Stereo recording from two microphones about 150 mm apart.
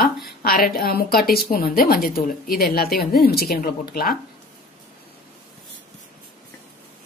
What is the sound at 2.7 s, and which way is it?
A woman's voice, 90° left.